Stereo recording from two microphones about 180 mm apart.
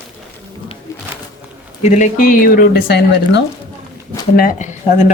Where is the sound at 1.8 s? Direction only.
45° left (ahead or behind); by 3.4 s 65° left (ahead or behind).